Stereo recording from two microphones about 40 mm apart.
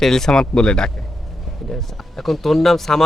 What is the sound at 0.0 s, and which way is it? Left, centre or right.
Speech, centre.